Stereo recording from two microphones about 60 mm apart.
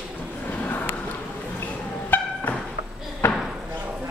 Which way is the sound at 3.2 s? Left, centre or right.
Left.